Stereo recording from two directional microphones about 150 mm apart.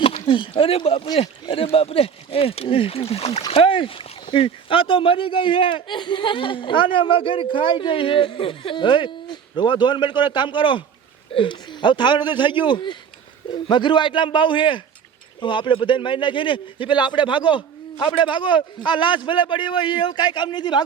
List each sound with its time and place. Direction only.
0.0 s speech: 35° left (ahead or behind)